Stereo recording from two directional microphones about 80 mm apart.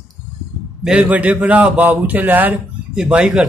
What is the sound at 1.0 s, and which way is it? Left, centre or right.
Speech, centre.